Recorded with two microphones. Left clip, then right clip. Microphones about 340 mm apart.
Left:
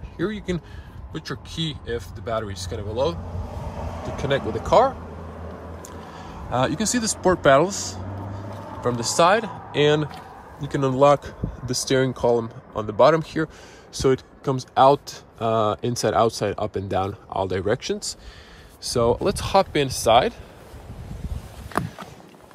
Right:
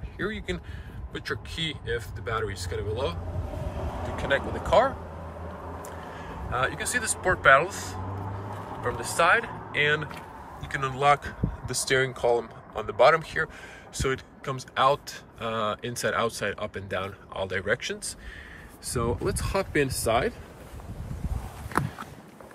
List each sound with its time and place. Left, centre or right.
1.1 s speech: centre
4.2 s speech: centre
6.5 s speech: centre
9.0 s speech: centre